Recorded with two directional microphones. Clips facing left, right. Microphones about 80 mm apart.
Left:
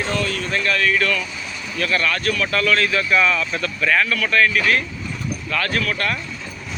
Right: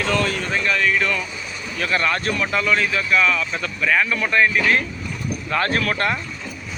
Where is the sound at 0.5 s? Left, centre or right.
Centre.